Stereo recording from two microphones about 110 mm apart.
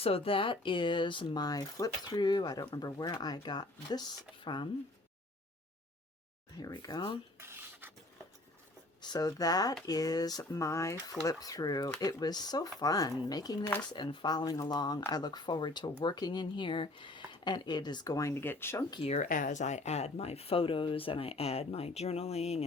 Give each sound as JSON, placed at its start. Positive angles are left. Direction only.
{"t": 0.0, "sound": "speech", "side_deg": 60}
{"t": 6.6, "sound": "speech", "side_deg": 35}
{"t": 7.3, "sound": "a sound", "side_deg": -20}
{"t": 9.0, "sound": "speech", "side_deg": 40}
{"t": 19.0, "sound": "speech", "side_deg": 90}